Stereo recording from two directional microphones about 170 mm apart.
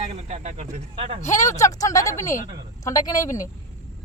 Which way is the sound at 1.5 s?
20° left (ahead or behind).